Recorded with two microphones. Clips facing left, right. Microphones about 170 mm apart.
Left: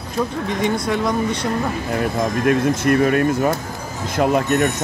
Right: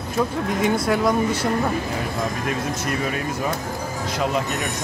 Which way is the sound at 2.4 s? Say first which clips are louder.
Left 9 dB; 60° left (ahead or behind).